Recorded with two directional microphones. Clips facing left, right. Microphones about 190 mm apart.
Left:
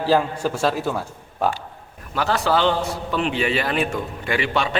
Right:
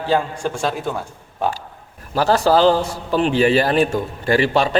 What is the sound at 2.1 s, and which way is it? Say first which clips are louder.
A man's voice: right 5 dB; 35° right (ahead or behind).